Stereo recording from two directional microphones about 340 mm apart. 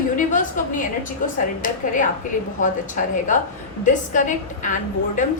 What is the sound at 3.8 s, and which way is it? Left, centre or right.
Speech, left.